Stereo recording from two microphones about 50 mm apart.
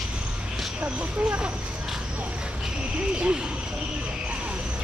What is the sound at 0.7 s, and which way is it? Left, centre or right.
Speech, right.